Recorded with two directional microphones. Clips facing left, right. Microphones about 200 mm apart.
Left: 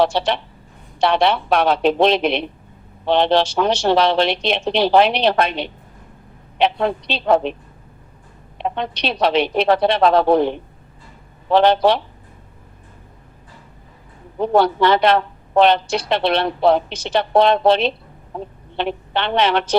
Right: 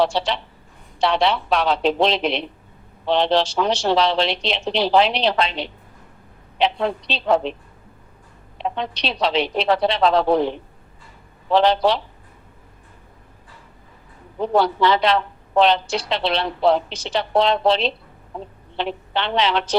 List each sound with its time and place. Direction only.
0.0 s a woman's voice: 50° left (ahead or behind)
8.5 s a woman's voice: 55° left (ahead or behind)
14.3 s a woman's voice: 55° left (ahead or behind)